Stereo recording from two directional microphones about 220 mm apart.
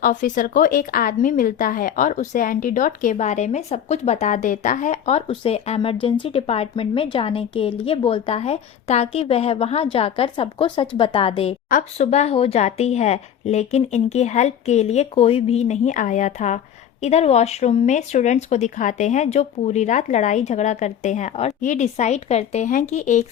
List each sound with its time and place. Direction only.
0.0 s speech: 35° left (ahead or behind)